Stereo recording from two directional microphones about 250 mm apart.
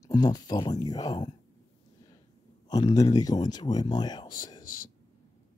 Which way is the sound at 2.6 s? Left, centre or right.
Centre.